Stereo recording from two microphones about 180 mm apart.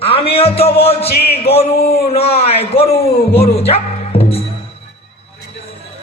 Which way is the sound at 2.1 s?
35° left (ahead or behind).